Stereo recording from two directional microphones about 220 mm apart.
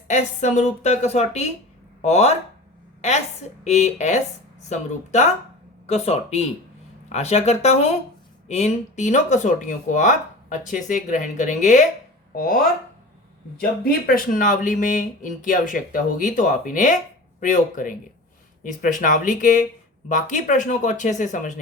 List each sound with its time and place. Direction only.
0.1 s speech: 30° left (ahead or behind)
13.8 s speech: 40° left (ahead or behind)